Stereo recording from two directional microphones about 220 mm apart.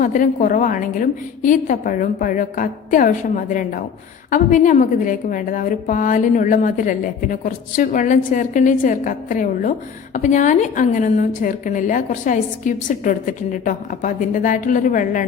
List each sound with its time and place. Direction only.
0.0 s a woman's voice: 35° left (ahead or behind)